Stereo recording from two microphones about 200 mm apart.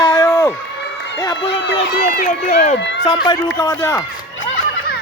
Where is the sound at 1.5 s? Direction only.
55° left (ahead or behind).